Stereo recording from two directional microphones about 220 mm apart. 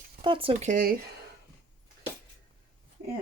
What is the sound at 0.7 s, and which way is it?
Speech, 40° right (ahead or behind).